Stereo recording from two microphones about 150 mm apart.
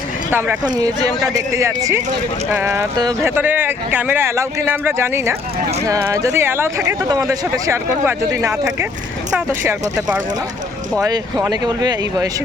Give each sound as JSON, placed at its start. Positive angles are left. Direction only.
{"t": 0.3, "sound": "speech", "side_deg": -15}
{"t": 0.6, "sound": "speech", "side_deg": -25}
{"t": 10.9, "sound": "speech", "side_deg": -20}